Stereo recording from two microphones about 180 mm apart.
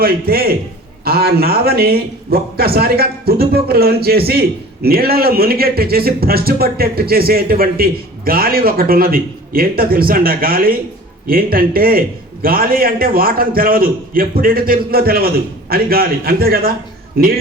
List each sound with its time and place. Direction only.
0.0 s a man's voice: 55° right (ahead or behind)